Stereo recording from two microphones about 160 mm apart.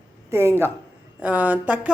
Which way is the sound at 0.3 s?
15° right (ahead or behind).